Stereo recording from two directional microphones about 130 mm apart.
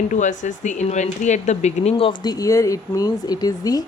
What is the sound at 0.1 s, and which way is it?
A woman's voice, 75° left (ahead or behind).